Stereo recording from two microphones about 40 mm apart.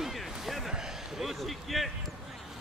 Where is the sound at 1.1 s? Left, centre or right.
Centre.